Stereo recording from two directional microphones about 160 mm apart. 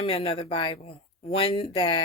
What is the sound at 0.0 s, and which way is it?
Speech, 35° left (ahead or behind).